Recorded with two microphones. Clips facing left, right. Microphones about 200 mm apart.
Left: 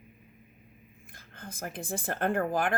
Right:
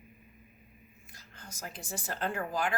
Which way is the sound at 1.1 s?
55° left (ahead or behind).